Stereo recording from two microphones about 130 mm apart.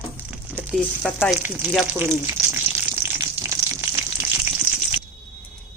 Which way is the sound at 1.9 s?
20° right (ahead or behind).